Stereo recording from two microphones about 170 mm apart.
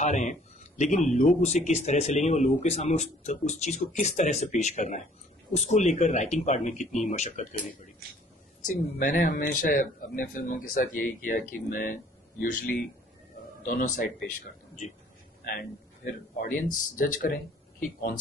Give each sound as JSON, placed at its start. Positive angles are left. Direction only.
{"t": 0.0, "sound": "speech", "side_deg": 45}
{"t": 13.7, "sound": "speech", "side_deg": 50}
{"t": 15.4, "sound": "a man's voice", "side_deg": 60}